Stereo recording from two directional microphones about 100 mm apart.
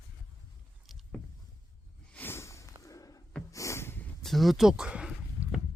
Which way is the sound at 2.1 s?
20° left (ahead or behind).